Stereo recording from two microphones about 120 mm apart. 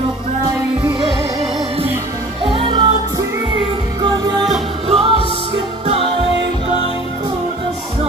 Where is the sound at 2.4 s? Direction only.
45° right (ahead or behind).